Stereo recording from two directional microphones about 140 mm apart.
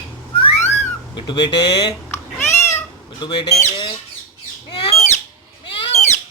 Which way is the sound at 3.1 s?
35° left (ahead or behind).